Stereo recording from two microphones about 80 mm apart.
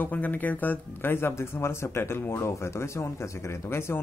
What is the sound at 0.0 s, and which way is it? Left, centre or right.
Speech, left.